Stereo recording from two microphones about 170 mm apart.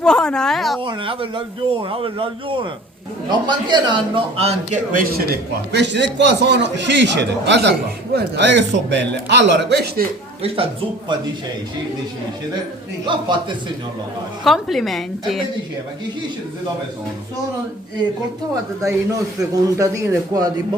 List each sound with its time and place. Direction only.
0.0 s a woman's voice: 5° left (ahead or behind)
0.8 s a man's voice: 30° right (ahead or behind)
4.9 s a man's voice: 60° right (ahead or behind); by 10.1 s 75° right (ahead or behind)
10.4 s speech: 35° right (ahead or behind)
13.1 s a man's voice: 30° right (ahead or behind)
14.4 s a woman's voice: centre (ahead or behind)
18.8 s a man's voice: 20° right (ahead or behind)